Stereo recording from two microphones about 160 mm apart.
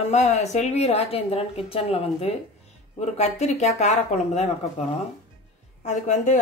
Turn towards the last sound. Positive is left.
turn(degrees=50)  # may be behind; listen again after turning